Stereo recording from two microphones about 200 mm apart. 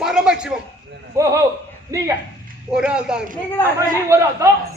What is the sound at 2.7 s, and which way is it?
A man's voice, 5° right (ahead or behind).